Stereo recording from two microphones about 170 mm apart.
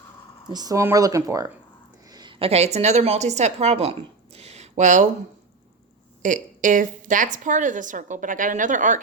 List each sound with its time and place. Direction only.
0.5 s a woman's voice: 20° right (ahead or behind); by 5.0 s 45° right (ahead or behind)
6.2 s a woman's voice: 50° right (ahead or behind)